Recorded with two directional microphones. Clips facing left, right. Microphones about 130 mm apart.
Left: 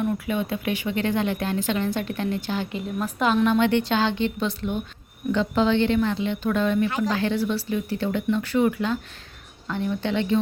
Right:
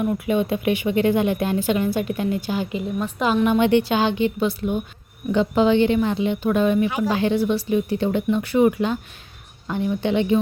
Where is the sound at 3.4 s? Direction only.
15° right (ahead or behind).